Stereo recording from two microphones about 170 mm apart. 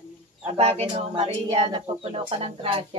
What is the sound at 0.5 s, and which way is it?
Speech, 40° right (ahead or behind).